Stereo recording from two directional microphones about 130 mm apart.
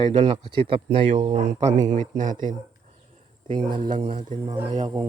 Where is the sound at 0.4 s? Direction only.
40° right (ahead or behind).